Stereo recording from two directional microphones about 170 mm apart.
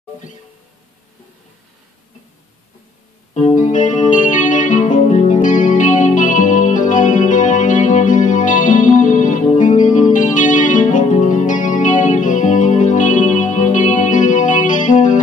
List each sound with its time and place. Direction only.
3.3 s music: 45° left (ahead or behind)